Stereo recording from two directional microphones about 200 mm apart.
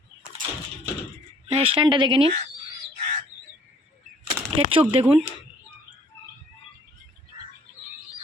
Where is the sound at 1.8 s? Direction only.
25° right (ahead or behind).